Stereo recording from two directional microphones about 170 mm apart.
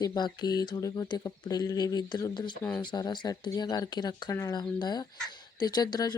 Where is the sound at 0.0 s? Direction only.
25° left (ahead or behind).